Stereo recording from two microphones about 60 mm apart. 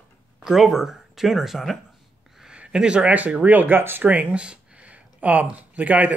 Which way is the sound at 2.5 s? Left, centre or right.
Centre.